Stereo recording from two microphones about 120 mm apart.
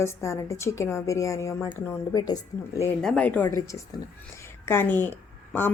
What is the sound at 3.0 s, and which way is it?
Speech, 10° left (ahead or behind).